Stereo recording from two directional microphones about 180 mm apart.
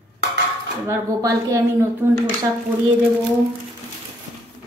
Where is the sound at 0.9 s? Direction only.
20° right (ahead or behind).